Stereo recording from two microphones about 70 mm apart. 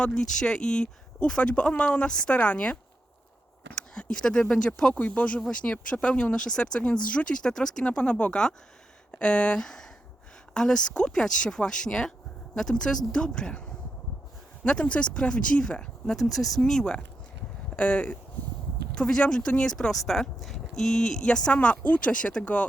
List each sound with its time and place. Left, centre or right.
0.0 s speech: centre
14.6 s speech: centre
16.1 s speech: centre